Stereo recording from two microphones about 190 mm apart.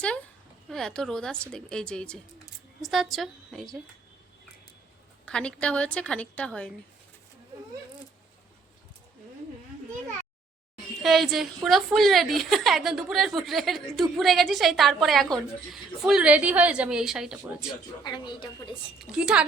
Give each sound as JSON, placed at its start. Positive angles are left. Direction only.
{"t": 0.7, "sound": "a woman's voice", "side_deg": 0}
{"t": 5.2, "sound": "a woman's voice", "side_deg": 5}
{"t": 11.0, "sound": "a woman's voice", "side_deg": 0}
{"t": 18.0, "sound": "speech", "side_deg": 25}
{"t": 18.9, "sound": "a woman's voice", "side_deg": -5}